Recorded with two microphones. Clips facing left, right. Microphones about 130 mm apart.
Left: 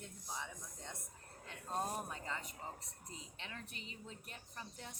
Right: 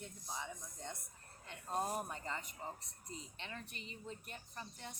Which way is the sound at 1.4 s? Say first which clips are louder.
Right 1 dB; 5° right (ahead or behind).